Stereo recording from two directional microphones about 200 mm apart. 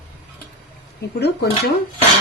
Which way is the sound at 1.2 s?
55° left (ahead or behind).